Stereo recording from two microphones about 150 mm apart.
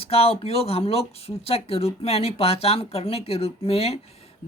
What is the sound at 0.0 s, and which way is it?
Speech, 40° left (ahead or behind).